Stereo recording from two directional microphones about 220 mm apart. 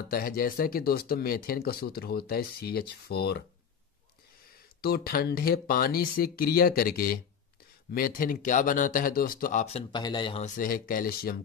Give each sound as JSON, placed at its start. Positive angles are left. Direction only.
{"t": 0.1, "sound": "speech", "side_deg": 40}
{"t": 4.8, "sound": "speech", "side_deg": 45}
{"t": 10.4, "sound": "speech", "side_deg": 40}